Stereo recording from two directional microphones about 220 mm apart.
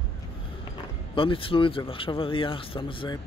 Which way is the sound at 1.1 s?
25° left (ahead or behind).